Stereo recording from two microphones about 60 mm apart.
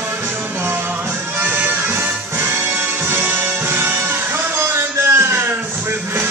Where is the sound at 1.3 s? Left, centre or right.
Right.